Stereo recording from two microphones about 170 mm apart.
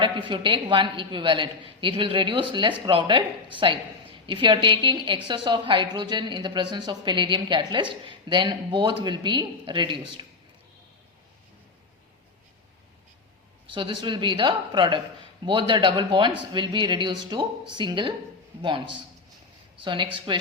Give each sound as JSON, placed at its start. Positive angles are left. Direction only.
{"t": 0.0, "sound": "a woman's voice", "side_deg": -30}
{"t": 13.7, "sound": "a woman's voice", "side_deg": -30}
{"t": 19.8, "sound": "a woman's voice", "side_deg": -30}